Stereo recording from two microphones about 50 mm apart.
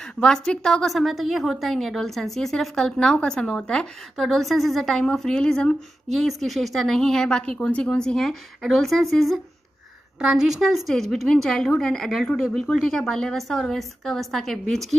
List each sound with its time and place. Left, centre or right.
0.2 s a woman's voice: centre
4.2 s a woman's voice: centre; by 5.8 s left
6.1 s a woman's voice: centre
8.2 s a woman's voice: centre
10.1 s a woman's voice: centre
10.6 s a woman's voice: centre